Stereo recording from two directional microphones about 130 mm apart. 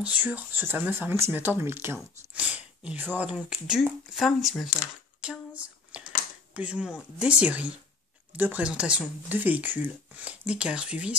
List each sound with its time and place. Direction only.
0.0 s speech: 10° right (ahead or behind)
5.2 s a sound: 10° right (ahead or behind)
6.5 s speech: 10° right (ahead or behind)